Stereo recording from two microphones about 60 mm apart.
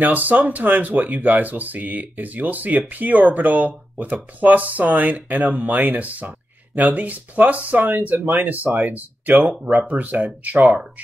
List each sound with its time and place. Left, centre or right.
0.0 s speech: right